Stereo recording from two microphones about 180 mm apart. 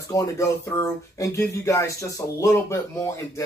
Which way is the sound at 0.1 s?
20° left (ahead or behind).